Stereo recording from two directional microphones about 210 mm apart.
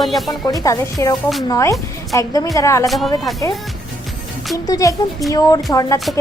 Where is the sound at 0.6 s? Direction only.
15° left (ahead or behind).